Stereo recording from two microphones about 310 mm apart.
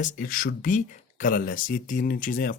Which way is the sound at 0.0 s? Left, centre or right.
Left.